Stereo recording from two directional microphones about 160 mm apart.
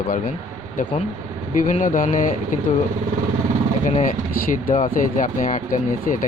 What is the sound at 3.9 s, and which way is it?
Speech, 55° left (ahead or behind).